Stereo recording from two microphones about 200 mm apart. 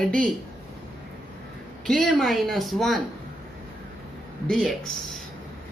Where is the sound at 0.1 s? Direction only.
Centre (ahead or behind).